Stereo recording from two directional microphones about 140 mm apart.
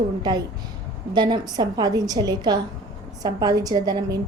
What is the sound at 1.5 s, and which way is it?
A woman's voice, 30° right (ahead or behind).